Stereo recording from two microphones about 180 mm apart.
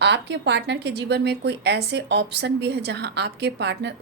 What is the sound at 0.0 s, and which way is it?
A woman's voice, 75° right (ahead or behind).